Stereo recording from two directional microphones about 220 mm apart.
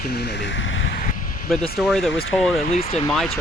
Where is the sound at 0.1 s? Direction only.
50° left (ahead or behind).